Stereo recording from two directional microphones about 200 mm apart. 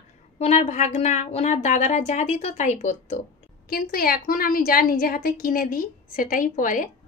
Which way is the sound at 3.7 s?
50° left (ahead or behind).